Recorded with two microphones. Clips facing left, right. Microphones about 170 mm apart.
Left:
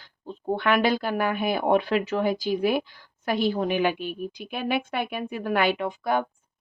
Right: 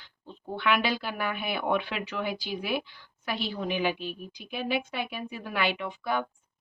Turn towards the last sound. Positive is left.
turn(degrees=45)  # may be behind; listen again after turning